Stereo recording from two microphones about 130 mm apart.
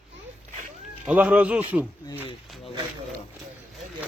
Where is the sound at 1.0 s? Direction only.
10° right (ahead or behind).